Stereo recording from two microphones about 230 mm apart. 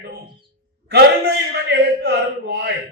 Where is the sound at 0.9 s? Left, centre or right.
Right.